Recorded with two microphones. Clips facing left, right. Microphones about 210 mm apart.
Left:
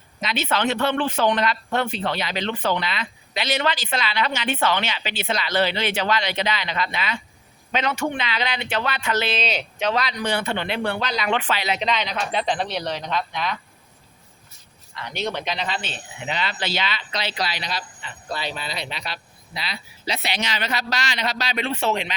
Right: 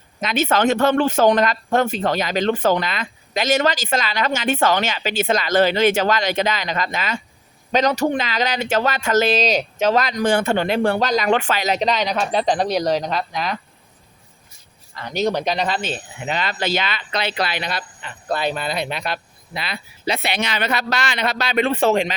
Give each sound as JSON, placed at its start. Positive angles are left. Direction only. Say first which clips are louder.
{"t": 0.2, "sound": "speech", "louder": "right 5 dB", "side_deg": -50}
{"t": 14.9, "sound": "speech", "louder": "right 7 dB", "side_deg": -40}